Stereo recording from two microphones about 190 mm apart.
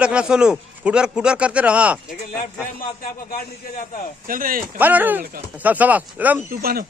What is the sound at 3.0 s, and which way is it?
A man's voice, 50° left (ahead or behind).